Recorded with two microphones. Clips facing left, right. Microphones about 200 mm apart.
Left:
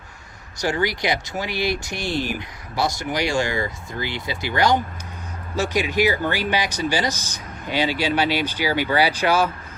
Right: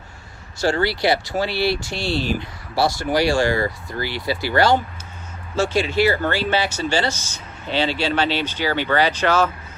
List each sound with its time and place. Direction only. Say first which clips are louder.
0.6 s speech: right 3 dB; 15° left (ahead or behind)